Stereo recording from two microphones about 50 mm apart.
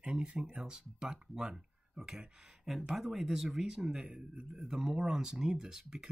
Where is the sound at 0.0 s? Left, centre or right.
Centre.